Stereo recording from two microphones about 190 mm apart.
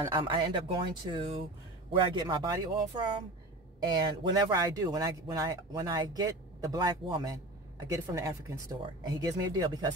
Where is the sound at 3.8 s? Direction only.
25° right (ahead or behind).